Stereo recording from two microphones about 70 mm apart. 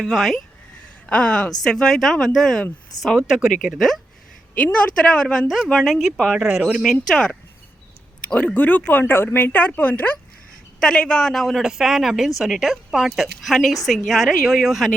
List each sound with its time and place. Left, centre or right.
0.0 s a woman's voice: centre
1.0 s a woman's voice: centre
3.8 s a woman's voice: centre
4.5 s a woman's voice: centre
6.8 s speech: centre; by 10.2 s left
10.8 s a woman's voice: centre